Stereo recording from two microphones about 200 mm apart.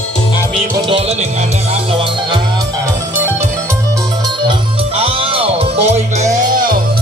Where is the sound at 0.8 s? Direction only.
25° right (ahead or behind).